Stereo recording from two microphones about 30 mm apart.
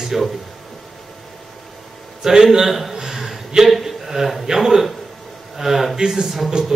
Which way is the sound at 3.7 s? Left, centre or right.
Centre.